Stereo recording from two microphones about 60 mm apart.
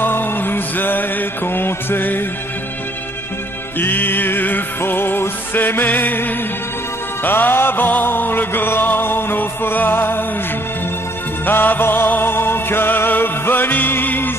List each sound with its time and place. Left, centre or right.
0.0 s music: left
3.8 s music: left
11.4 s music: left